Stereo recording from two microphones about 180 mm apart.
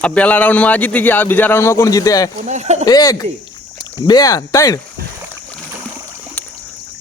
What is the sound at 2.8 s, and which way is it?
Speech, 20° left (ahead or behind).